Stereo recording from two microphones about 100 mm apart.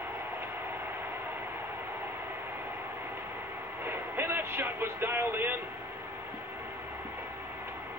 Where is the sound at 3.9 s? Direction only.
20° right (ahead or behind).